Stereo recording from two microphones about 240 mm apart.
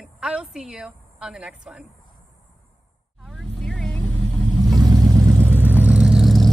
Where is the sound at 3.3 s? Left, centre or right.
Centre.